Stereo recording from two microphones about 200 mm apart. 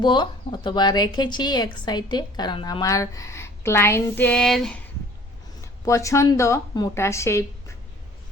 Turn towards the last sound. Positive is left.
turn(degrees=15)  # may be behind; listen again after turning